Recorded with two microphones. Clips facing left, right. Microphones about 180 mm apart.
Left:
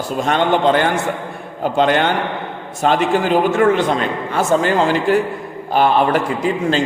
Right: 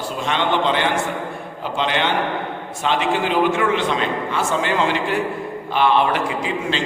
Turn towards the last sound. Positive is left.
turn(degrees=45)  # may be behind; listen again after turning